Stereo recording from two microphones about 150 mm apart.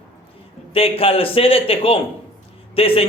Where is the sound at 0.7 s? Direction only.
40° left (ahead or behind).